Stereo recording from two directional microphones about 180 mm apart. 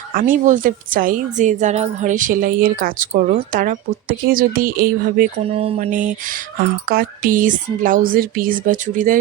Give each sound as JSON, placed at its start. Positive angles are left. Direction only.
{"t": 0.1, "sound": "a woman's voice", "side_deg": -50}
{"t": 5.5, "sound": "a woman's voice", "side_deg": -35}